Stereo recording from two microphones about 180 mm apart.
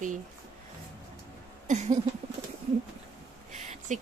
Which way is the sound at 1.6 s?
45° right (ahead or behind).